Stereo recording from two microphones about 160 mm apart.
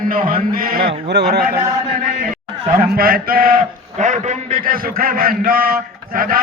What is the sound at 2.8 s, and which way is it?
A man's voice, 65° right (ahead or behind).